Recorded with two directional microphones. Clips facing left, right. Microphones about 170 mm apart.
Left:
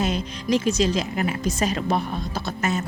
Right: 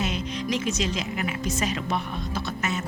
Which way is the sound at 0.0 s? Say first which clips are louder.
Left 3 dB; 35° left (ahead or behind).